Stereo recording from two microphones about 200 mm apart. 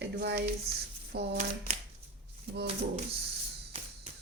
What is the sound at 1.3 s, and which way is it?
Speech, 40° right (ahead or behind).